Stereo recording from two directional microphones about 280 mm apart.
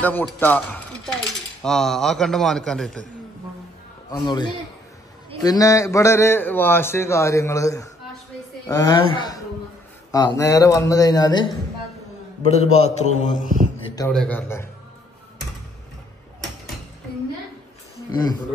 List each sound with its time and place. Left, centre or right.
0.0 s a sound: centre
1.6 s a man's voice: centre
4.1 s a man's voice: centre
13.9 s a man's voice: centre